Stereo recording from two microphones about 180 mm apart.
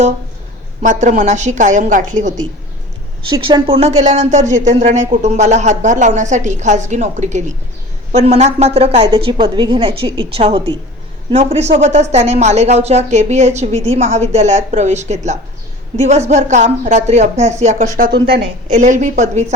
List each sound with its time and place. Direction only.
0.8 s a woman's voice: 45° right (ahead or behind)
3.2 s a woman's voice: 25° right (ahead or behind); by 18.4 s 60° right (ahead or behind)
18.7 s speech: 45° right (ahead or behind)